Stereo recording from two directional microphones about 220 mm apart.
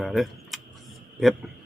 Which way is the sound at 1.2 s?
Centre (ahead or behind).